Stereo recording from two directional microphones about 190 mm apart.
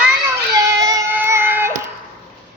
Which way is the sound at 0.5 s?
20° right (ahead or behind).